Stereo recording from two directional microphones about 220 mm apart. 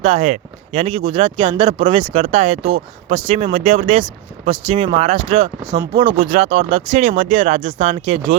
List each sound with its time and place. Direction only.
0.0 s speech: 30° right (ahead or behind)